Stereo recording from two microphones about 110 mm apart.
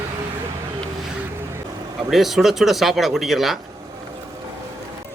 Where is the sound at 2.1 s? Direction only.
Centre (ahead or behind).